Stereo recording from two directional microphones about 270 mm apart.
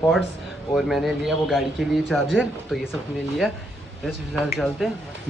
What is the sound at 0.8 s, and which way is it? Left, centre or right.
Speech, centre.